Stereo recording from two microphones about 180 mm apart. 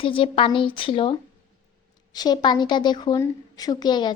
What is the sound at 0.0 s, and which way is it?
A woman's voice, 30° left (ahead or behind).